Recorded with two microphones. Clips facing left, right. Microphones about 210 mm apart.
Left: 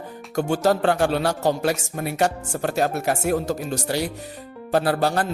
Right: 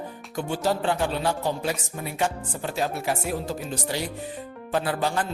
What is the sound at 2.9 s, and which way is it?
Speech, 45° left (ahead or behind).